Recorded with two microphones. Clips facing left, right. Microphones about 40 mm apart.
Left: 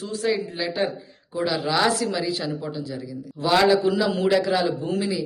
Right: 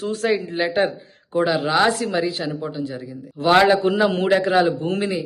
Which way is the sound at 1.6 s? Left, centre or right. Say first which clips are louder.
Right 3 dB; right.